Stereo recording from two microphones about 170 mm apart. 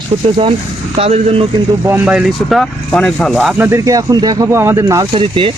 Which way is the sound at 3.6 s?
20° right (ahead or behind).